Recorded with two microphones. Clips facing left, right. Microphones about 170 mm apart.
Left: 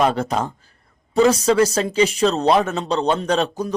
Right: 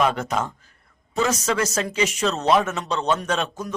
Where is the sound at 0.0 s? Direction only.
35° left (ahead or behind).